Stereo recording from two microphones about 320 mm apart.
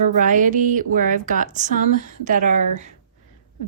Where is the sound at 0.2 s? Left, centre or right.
Right.